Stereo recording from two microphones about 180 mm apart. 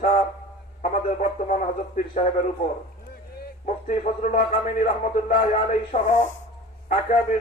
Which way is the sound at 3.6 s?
40° left (ahead or behind).